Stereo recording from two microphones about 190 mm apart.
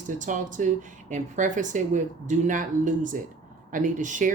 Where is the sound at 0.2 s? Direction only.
40° right (ahead or behind).